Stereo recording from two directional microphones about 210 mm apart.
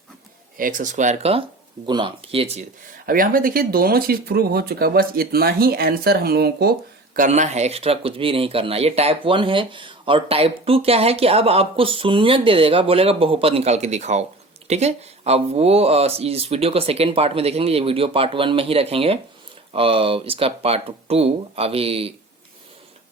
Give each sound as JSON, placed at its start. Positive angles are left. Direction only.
{"t": 0.5, "sound": "speech", "side_deg": -40}
{"t": 3.1, "sound": "speech", "side_deg": -40}
{"t": 7.2, "sound": "speech", "side_deg": -35}